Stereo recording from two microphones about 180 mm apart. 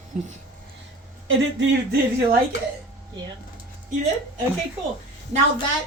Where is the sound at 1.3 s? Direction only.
85° right.